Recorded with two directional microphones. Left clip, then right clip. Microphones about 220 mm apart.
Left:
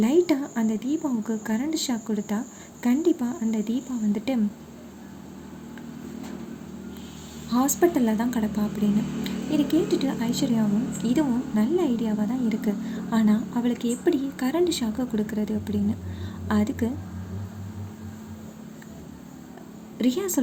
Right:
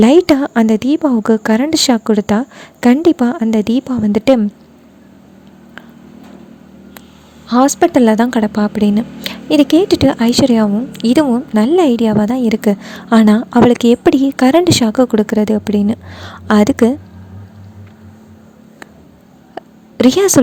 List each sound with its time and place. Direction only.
0.0 s speech: 45° right (ahead or behind)
7.8 s speech: 40° right (ahead or behind)
20.0 s speech: 45° right (ahead or behind)